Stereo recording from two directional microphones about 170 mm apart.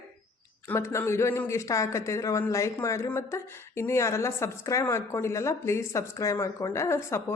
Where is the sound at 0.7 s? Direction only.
15° left (ahead or behind).